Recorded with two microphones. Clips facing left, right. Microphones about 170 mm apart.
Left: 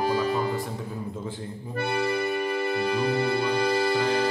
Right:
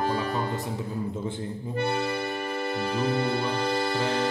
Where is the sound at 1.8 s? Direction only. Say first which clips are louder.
Left 3 dB; 15° left (ahead or behind).